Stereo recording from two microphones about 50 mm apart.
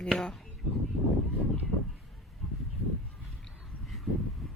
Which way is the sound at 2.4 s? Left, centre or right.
Centre.